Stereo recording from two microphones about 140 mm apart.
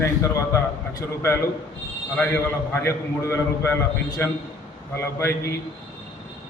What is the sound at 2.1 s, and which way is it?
A man's voice, 15° left (ahead or behind).